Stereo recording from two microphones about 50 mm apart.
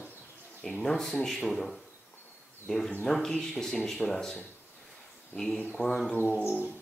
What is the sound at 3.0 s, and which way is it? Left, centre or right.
Speech, centre.